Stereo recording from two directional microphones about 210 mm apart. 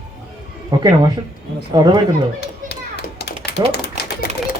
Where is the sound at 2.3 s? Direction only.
50° left (ahead or behind).